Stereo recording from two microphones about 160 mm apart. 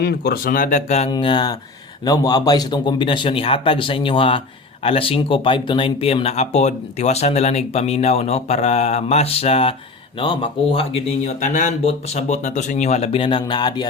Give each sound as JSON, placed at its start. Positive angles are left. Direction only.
{"t": 0.0, "sound": "speech", "side_deg": 75}
{"t": 1.1, "sound": "a man's voice", "side_deg": 30}
{"t": 11.4, "sound": "speech", "side_deg": 50}